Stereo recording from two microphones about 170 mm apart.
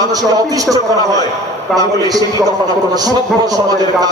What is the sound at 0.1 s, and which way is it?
Speech, 20° right (ahead or behind).